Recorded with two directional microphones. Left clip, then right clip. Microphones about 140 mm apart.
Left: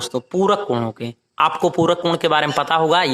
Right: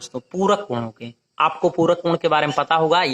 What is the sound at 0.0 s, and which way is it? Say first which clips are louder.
A man's voice: left 3 dB; 35° left (ahead or behind).